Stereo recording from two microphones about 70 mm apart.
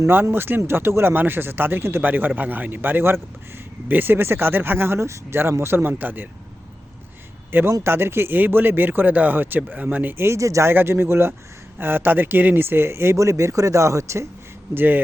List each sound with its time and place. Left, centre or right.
0.1 s a man's voice: right
7.5 s a man's voice: right
14.8 s speech: right